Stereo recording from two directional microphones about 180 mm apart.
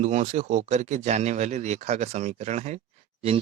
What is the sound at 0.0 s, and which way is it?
Speech, 40° right (ahead or behind).